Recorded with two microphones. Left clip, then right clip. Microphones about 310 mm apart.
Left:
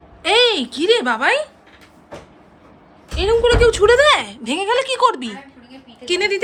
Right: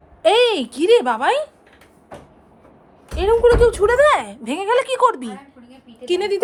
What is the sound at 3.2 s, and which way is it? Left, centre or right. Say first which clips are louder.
A woman's voice: right 1 dB; centre.